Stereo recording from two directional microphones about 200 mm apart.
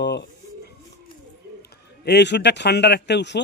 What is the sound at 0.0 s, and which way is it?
Pigeon, 55° left (ahead or behind).